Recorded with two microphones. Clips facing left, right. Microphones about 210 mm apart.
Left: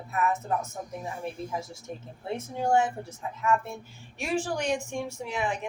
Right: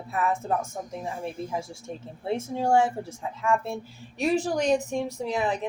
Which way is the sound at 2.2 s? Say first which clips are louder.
Right 4 dB; 25° right (ahead or behind).